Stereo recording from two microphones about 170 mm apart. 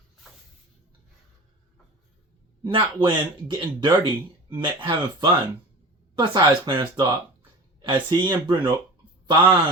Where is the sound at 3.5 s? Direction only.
25° right (ahead or behind).